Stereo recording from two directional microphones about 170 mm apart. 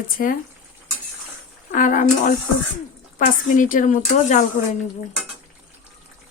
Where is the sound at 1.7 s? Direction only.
50° left (ahead or behind).